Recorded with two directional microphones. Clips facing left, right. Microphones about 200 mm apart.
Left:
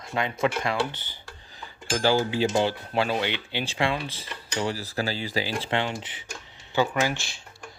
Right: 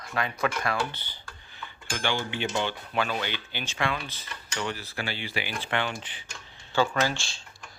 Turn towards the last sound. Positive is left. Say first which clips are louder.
# left 1 dB
turn(degrees=20)  # may be behind; listen again after turning